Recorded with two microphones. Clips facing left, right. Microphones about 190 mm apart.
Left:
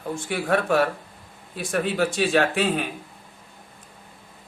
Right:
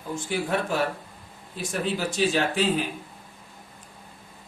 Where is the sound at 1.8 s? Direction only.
60° left (ahead or behind).